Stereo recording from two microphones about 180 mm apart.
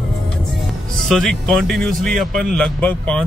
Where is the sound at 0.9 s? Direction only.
Centre (ahead or behind).